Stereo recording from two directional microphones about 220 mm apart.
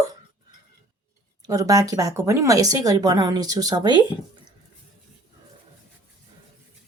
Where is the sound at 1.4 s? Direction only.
15° right (ahead or behind).